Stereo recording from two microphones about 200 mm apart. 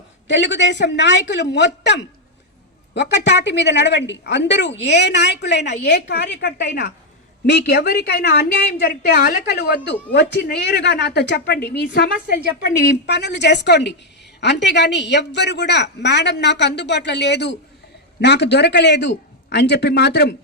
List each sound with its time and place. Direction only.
0.3 s a woman's voice: 60° left (ahead or behind)
12.9 s a woman's voice: 55° left (ahead or behind)